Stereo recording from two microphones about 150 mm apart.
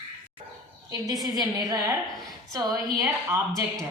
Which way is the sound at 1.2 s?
25° right (ahead or behind).